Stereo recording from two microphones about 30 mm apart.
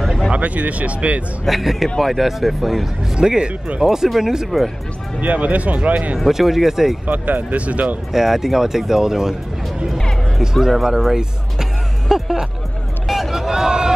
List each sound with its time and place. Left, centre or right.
0.3 s speech: right
1.4 s speech: centre
3.2 s speech: right
3.8 s speech: centre
5.2 s speech: right
6.3 s speech: centre
7.1 s speech: right
8.1 s speech: centre
10.4 s speech: centre
13.0 s hubbub: centre
13.5 s a sound: right